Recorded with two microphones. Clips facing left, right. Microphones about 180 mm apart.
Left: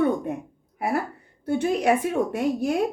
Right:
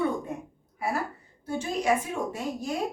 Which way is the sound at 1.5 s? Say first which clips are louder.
Left 5 dB; 65° left (ahead or behind).